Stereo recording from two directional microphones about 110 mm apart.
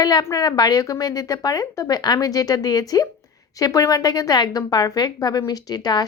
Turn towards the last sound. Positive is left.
turn(degrees=35)  # may be behind; listen again after turning